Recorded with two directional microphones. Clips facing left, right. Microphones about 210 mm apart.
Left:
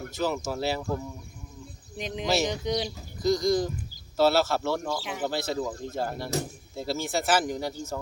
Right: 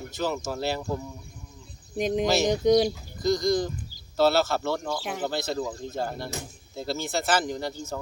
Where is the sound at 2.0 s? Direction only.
45° right (ahead or behind).